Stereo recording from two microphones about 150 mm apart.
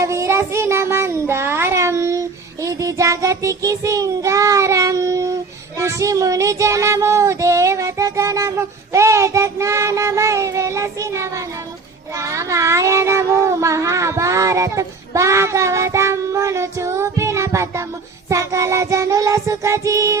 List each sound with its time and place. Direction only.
0.0 s child singing: 20° right (ahead or behind)
5.8 s meow: 20° right (ahead or behind)